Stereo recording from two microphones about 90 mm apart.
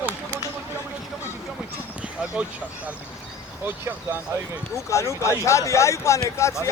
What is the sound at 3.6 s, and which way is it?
Speech, 20° right (ahead or behind).